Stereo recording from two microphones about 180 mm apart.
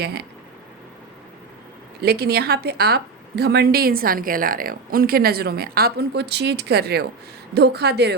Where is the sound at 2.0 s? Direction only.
60° right (ahead or behind).